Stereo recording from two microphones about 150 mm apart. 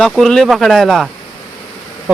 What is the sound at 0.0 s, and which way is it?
Speech, 5° left (ahead or behind).